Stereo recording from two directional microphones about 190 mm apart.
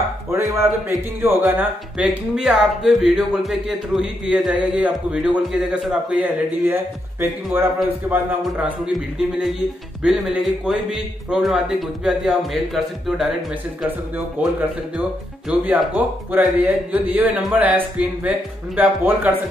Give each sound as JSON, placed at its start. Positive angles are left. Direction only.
{"t": 0.3, "sound": "speech", "side_deg": -15}
{"t": 14.4, "sound": "speech", "side_deg": -10}